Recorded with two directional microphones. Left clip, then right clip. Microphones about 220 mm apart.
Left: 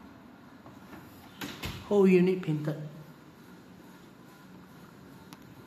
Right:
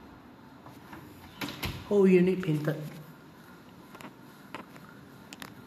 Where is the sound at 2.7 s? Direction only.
20° right (ahead or behind).